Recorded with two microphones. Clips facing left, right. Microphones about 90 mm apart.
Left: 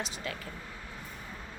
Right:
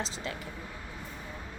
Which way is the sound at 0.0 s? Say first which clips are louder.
Right 1 dB; 25° right (ahead or behind).